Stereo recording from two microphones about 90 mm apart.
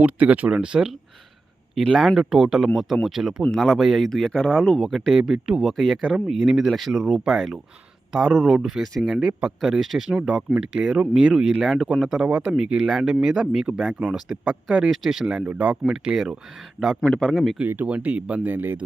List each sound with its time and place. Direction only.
0.0 s speech: 15° right (ahead or behind); by 4.4 s 5° left (ahead or behind)
4.4 s speech: 5° right (ahead or behind)
12.2 s speech: 10° right (ahead or behind)
14.4 s speech: 15° right (ahead or behind)
14.8 s speech: centre (ahead or behind)
15.4 s speech: 20° right (ahead or behind)
15.9 s speech: centre (ahead or behind)
17.6 s speech: 20° right (ahead or behind)